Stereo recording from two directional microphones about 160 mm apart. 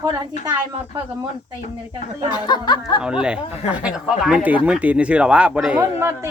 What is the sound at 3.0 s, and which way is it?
Speech, 5° right (ahead or behind).